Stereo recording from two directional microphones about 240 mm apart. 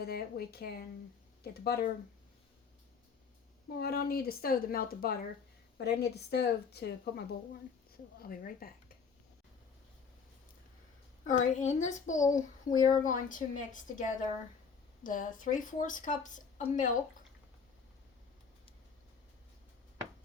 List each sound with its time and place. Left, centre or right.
0.0 s a woman's voice: left
3.7 s a woman's voice: left
11.3 s a woman's voice: left
12.3 s a child's voice: centre
13.1 s a woman's voice: left